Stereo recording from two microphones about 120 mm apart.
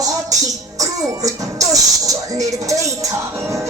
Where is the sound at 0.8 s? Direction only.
30° right (ahead or behind).